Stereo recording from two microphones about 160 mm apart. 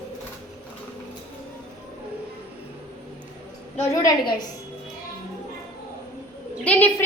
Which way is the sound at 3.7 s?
15° left (ahead or behind).